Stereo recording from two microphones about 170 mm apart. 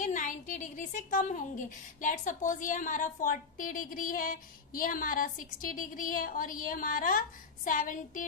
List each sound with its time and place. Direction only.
0.0 s a woman's voice: 45° left (ahead or behind)